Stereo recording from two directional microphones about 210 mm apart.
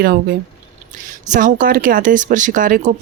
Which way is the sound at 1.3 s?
40° right (ahead or behind).